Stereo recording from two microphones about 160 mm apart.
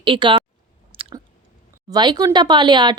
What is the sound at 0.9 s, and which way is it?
Chewing, 35° right (ahead or behind).